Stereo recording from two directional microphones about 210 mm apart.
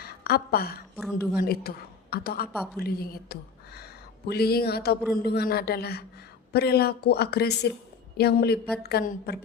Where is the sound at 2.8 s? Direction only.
45° left (ahead or behind).